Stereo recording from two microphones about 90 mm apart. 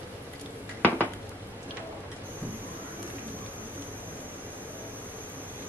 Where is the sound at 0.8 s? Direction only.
20° left (ahead or behind).